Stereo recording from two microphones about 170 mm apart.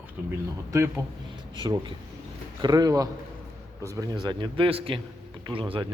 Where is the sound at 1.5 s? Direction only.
25° right (ahead or behind).